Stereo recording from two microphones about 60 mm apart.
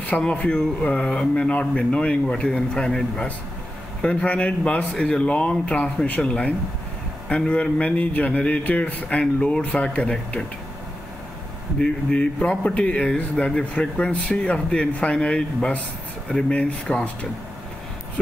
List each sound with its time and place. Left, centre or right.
0.2 s speech: centre
4.0 s speech: centre
11.8 s speech: centre